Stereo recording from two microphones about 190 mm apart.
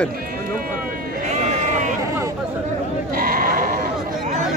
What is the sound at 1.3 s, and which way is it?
Sheep, 40° right (ahead or behind).